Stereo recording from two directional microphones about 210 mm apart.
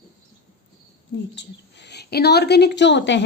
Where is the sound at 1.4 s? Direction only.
55° left (ahead or behind).